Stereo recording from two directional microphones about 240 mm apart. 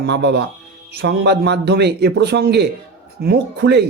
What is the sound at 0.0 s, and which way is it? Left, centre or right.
Speech, right.